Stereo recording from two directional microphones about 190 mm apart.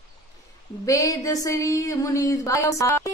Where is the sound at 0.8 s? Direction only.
15° left (ahead or behind).